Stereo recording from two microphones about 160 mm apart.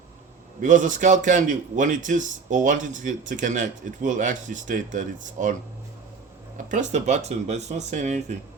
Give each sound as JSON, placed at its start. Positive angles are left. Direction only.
{"t": 0.6, "sound": "a man's voice", "side_deg": -55}
{"t": 6.7, "sound": "a man's voice", "side_deg": -50}